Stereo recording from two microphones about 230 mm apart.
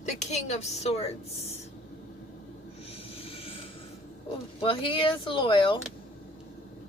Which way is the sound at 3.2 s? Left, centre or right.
Left.